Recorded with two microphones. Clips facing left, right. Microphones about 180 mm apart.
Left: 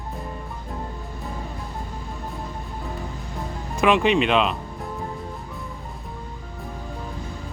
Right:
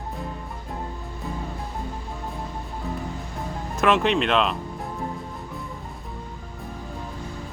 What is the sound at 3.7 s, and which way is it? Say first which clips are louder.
Speech: left 2 dB; centre (ahead or behind).